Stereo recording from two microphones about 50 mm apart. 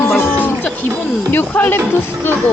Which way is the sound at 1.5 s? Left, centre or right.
Left.